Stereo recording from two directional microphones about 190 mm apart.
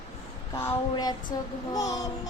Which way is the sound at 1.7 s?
20° left (ahead or behind).